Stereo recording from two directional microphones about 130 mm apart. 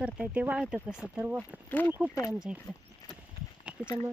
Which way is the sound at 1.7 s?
15° left (ahead or behind).